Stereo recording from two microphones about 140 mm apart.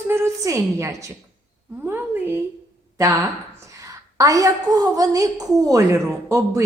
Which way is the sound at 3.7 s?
25° right (ahead or behind).